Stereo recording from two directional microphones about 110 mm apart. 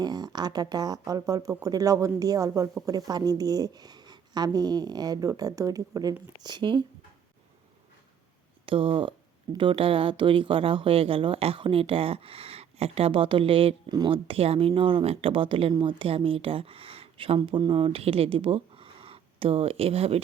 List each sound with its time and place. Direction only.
0.0 s speech: 40° right (ahead or behind)
6.4 s speech: 45° right (ahead or behind)
8.6 s a woman's voice: 55° right (ahead or behind)